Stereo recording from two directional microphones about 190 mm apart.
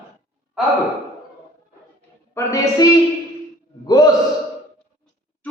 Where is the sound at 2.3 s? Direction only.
20° left (ahead or behind).